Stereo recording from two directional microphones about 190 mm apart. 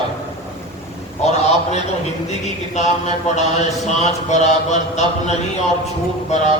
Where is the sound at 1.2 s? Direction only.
35° left (ahead or behind).